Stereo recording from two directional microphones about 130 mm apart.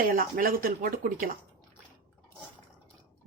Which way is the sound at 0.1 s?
90° right.